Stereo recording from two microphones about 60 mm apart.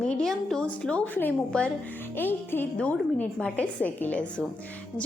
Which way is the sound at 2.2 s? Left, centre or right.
Left.